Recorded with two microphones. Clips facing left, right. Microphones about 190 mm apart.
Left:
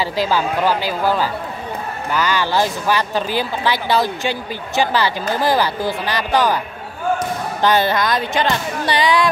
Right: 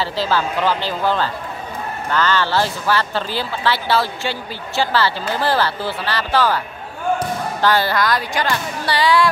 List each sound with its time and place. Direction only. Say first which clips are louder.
0.0 s speech: left 1 dB; 15° left (ahead or behind)
7.6 s speech: left 1 dB; 20° left (ahead or behind)